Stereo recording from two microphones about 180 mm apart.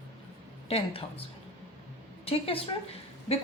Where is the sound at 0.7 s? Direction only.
30° left (ahead or behind).